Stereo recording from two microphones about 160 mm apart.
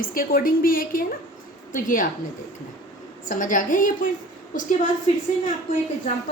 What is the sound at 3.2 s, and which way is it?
Speech, 55° left (ahead or behind).